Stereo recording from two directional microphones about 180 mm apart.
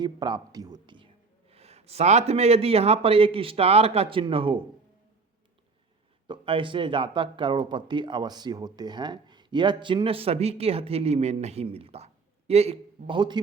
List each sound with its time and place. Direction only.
0.0 s a man's voice: 25° right (ahead or behind)
6.2 s speech: 25° right (ahead or behind)